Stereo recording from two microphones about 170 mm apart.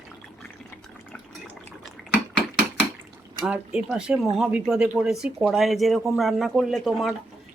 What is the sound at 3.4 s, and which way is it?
Speech, 5° right (ahead or behind).